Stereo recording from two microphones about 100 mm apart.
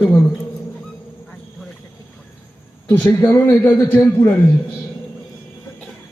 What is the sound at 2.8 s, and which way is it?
A man's voice, 15° left (ahead or behind).